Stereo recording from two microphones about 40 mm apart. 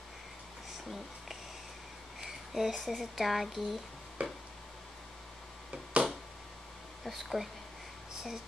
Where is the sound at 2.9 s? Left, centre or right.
Centre.